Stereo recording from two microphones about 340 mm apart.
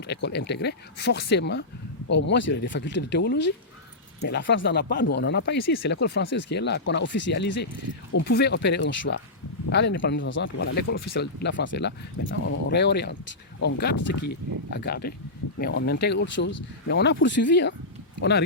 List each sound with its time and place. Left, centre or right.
0.1 s speech: left
14.2 s speech: left